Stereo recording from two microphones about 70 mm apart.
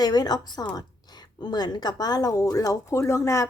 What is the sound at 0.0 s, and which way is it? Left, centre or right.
A woman's voice, left.